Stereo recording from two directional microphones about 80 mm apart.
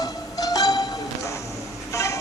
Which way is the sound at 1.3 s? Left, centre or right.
Left.